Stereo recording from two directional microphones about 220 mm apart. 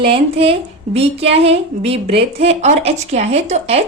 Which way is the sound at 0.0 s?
25° right (ahead or behind).